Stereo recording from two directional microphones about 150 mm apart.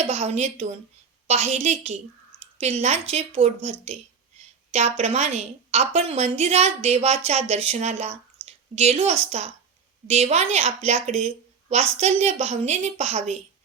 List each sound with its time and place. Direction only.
0.1 s a woman's voice: 50° right (ahead or behind)